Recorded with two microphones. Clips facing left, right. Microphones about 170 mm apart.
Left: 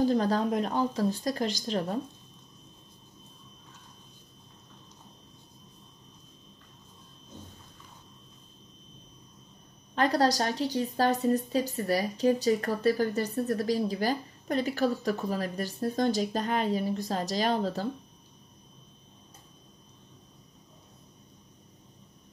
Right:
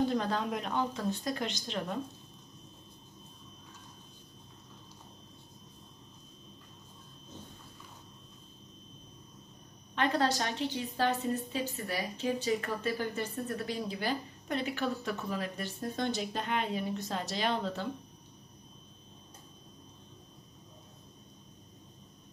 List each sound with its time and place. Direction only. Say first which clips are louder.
0.0 s a woman's voice: left 5 dB; 35° left (ahead or behind)
9.9 s a woman's voice: left 5 dB; 40° left (ahead or behind)